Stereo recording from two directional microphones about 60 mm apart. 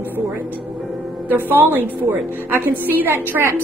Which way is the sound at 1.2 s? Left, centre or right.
Right.